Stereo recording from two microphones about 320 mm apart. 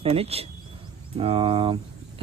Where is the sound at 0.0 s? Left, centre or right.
Centre.